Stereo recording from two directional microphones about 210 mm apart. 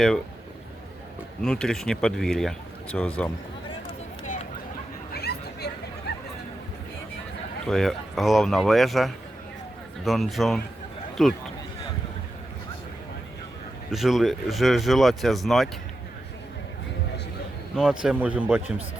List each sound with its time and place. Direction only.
1.4 s speech: 5° left (ahead or behind)
5.1 s chatter: 50° left (ahead or behind)
7.7 s speech: centre (ahead or behind)
13.9 s speech: centre (ahead or behind)
17.7 s speech: 5° right (ahead or behind)